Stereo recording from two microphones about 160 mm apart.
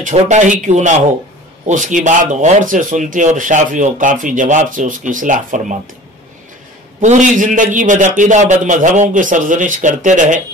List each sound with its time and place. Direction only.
0.0 s speech: 50° right (ahead or behind)
7.0 s speech: 50° right (ahead or behind)